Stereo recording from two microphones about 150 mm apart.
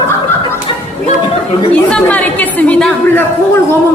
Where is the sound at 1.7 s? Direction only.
10° left (ahead or behind).